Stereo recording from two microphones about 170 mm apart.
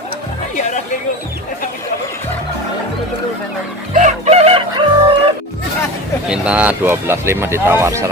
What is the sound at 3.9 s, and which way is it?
Chicken, 40° right (ahead or behind).